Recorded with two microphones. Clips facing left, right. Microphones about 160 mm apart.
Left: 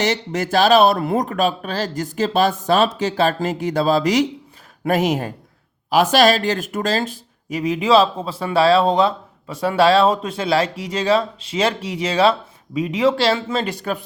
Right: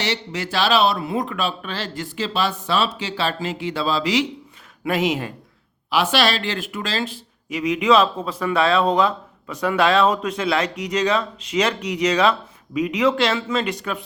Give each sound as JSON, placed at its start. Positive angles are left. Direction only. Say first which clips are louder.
{"t": 0.0, "sound": "speech", "louder": "left 5 dB", "side_deg": 45}